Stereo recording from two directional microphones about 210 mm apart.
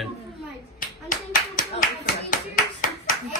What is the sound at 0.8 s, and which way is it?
Speech, 40° left (ahead or behind).